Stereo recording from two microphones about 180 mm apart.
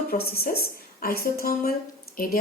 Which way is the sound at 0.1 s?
60° left (ahead or behind).